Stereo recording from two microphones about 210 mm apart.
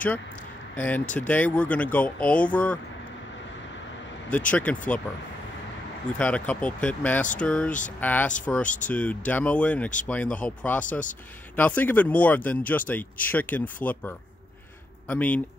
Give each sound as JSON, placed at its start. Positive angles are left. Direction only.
{"t": 0.7, "sound": "speech", "side_deg": 10}
{"t": 4.5, "sound": "speech", "side_deg": 5}
{"t": 6.1, "sound": "speech", "side_deg": 5}
{"t": 10.9, "sound": "speech", "side_deg": 40}
{"t": 11.5, "sound": "speech", "side_deg": 10}